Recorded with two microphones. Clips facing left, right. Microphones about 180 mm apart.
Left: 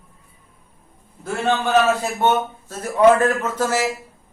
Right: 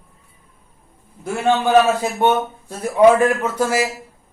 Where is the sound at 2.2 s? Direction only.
15° right (ahead or behind).